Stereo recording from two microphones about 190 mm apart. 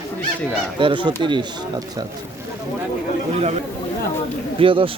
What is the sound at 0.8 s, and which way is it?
Speech, 25° right (ahead or behind).